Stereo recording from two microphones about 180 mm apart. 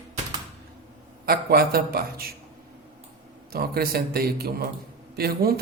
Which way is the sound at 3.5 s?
60° right (ahead or behind).